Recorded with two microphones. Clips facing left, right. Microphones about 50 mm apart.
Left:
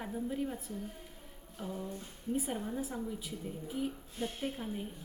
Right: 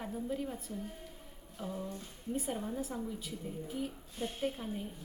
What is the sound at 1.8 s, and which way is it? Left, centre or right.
A woman's voice, centre.